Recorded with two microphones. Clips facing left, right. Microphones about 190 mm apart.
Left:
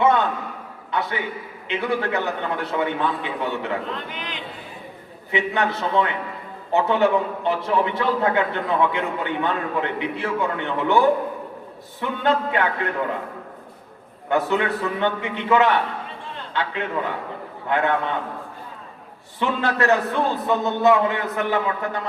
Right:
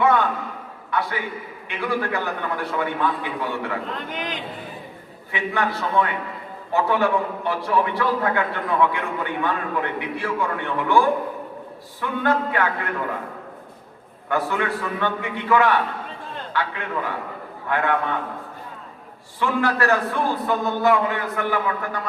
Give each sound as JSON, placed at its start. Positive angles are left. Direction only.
{"t": 0.0, "sound": "a sound", "side_deg": 20}
{"t": 0.9, "sound": "a man's voice", "side_deg": 20}
{"t": 4.1, "sound": "a man's voice", "side_deg": -45}
{"t": 5.3, "sound": "a man's voice", "side_deg": 20}
{"t": 14.3, "sound": "a man's voice", "side_deg": 20}
{"t": 19.4, "sound": "a man's voice", "side_deg": 20}